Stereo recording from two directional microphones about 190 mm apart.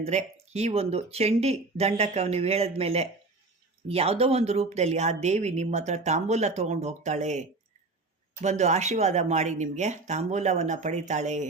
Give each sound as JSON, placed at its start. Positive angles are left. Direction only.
{"t": 0.0, "sound": "speech", "side_deg": -35}